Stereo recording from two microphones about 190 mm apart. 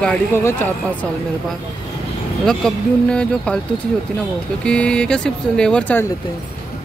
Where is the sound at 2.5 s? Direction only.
5° left (ahead or behind).